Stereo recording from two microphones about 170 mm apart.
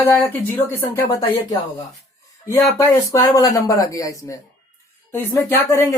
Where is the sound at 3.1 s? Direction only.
20° left (ahead or behind).